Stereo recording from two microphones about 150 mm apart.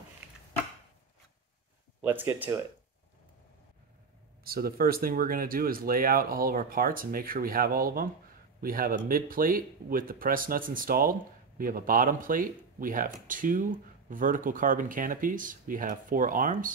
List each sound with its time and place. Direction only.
2.0 s speech: 15° right (ahead or behind)
4.5 s speech: 85° right; by 16.7 s 60° right (ahead or behind)